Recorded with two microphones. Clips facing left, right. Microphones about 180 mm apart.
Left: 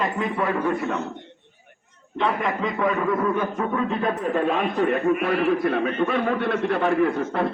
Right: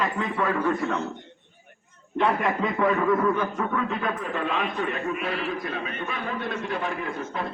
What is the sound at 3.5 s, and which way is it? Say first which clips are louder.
A man's voice: left 3 dB; 25° left (ahead or behind).